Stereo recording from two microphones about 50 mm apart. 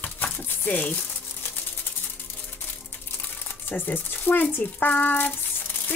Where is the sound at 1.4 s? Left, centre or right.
Left.